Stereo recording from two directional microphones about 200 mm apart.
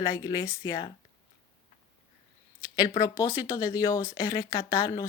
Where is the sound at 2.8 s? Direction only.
20° left (ahead or behind).